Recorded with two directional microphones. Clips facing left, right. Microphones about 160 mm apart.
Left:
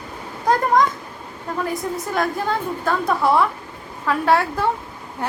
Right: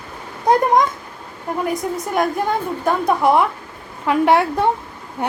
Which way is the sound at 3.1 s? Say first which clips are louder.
Right 2 dB; 20° right (ahead or behind).